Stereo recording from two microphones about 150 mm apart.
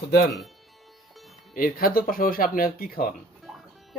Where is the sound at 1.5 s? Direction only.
70° left (ahead or behind).